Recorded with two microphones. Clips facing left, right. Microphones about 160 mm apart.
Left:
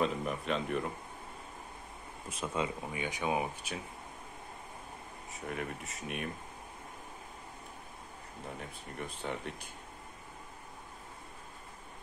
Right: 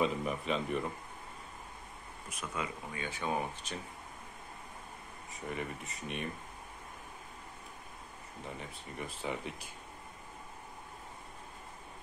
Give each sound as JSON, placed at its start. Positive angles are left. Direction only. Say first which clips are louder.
{"t": 0.0, "sound": "speech", "louder": "even", "side_deg": 0}
{"t": 2.2, "sound": "speech", "louder": "left 5 dB", "side_deg": 30}
{"t": 3.0, "sound": "speech", "louder": "left 2 dB", "side_deg": 15}
{"t": 5.3, "sound": "speech", "louder": "even", "side_deg": 0}
{"t": 8.5, "sound": "speech", "louder": "left 1 dB", "side_deg": 0}